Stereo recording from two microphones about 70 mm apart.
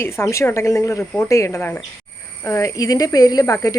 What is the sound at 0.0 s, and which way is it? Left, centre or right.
A woman's voice, left.